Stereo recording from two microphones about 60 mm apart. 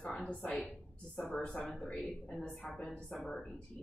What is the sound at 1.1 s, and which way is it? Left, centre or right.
Speech, centre.